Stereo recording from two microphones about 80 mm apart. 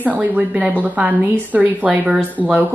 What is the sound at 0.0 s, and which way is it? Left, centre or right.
A woman's voice, centre.